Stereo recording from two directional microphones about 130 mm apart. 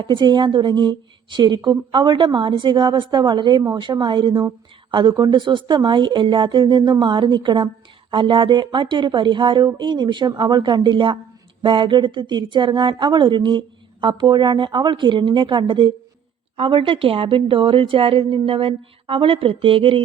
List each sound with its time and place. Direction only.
0.0 s a woman's voice: 35° right (ahead or behind)